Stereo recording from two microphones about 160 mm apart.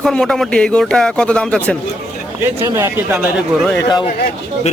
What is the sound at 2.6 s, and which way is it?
Speech, 15° right (ahead or behind).